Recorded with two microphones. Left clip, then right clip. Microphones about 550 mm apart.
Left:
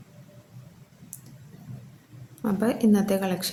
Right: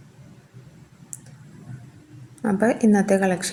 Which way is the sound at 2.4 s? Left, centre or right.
Left.